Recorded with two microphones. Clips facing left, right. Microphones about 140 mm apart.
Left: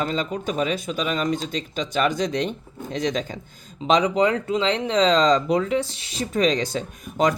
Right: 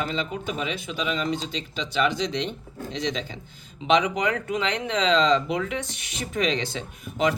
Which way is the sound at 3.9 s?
35° left (ahead or behind).